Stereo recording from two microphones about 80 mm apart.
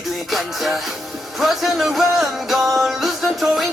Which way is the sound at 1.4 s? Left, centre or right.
Centre.